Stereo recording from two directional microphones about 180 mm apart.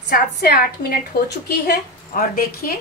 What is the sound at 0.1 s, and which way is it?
A woman's voice, 60° left (ahead or behind).